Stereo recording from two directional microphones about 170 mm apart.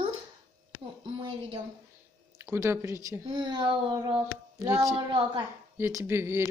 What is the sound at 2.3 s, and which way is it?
A woman's voice, 15° right (ahead or behind).